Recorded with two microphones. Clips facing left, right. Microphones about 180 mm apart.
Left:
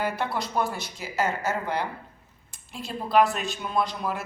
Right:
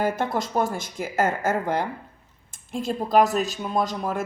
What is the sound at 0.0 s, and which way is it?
Speech, 45° right (ahead or behind).